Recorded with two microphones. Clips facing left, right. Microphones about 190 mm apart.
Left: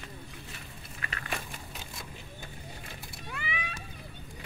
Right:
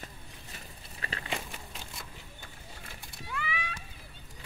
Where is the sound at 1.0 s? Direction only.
30° right (ahead or behind).